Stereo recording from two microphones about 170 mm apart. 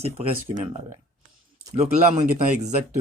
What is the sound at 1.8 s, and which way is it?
Speech, 40° right (ahead or behind).